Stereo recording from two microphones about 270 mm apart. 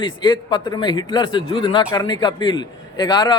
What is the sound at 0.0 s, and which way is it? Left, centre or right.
A man's voice, centre.